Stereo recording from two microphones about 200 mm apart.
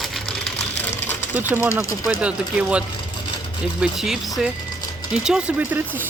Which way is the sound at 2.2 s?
5° right (ahead or behind).